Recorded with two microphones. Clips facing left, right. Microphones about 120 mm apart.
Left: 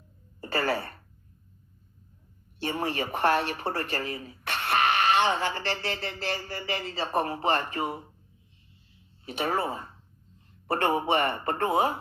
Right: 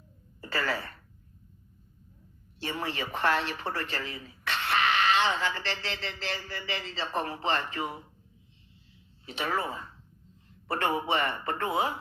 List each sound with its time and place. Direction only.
0.4 s speech: 45° left (ahead or behind)
2.6 s speech: 50° left (ahead or behind)
9.2 s speech: 45° left (ahead or behind)